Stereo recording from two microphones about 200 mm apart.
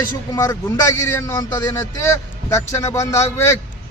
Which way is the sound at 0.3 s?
15° left (ahead or behind).